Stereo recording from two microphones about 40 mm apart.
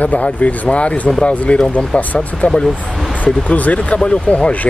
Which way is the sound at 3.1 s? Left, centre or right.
Left.